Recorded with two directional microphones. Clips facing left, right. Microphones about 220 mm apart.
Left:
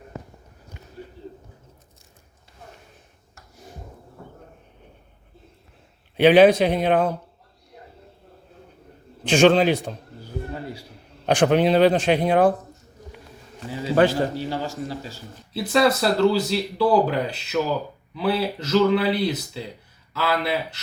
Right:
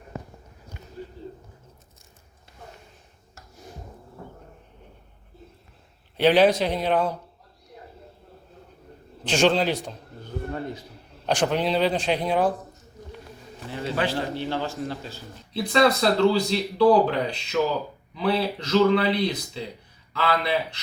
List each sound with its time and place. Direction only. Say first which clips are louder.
6.1 s speech: left 5 dB; 55° left (ahead or behind)
9.2 s speech: left 5 dB; 55° left (ahead or behind)
11.3 s speech: left 6 dB; 55° left (ahead or behind)
13.9 s a man's voice: left 8 dB; 45° left (ahead or behind)
14.5 s speech: even; 10° left (ahead or behind)